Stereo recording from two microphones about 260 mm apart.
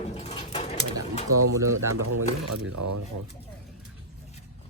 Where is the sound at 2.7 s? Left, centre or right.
Right.